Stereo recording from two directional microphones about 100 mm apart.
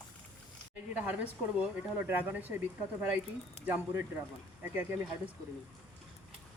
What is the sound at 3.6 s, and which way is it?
A woman's voice, 20° right (ahead or behind).